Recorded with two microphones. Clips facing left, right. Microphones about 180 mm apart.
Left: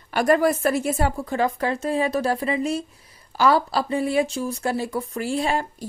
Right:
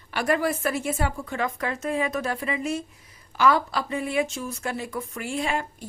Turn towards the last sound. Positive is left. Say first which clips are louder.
# left 4 dB
turn(degrees=35)  # may be behind; listen again after turning